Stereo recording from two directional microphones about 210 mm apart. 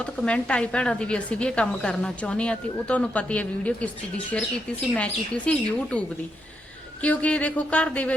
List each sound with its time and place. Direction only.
0.0 s a woman's voice: 5° left (ahead or behind)
7.0 s speech: 5° left (ahead or behind)